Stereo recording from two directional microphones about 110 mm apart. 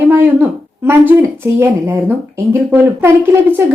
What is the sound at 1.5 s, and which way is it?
A woman's voice, 20° right (ahead or behind).